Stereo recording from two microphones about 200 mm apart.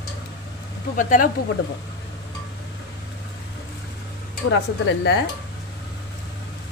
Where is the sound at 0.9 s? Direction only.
40° left (ahead or behind).